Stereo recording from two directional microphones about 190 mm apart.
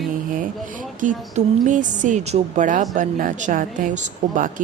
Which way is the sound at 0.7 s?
40° right (ahead or behind).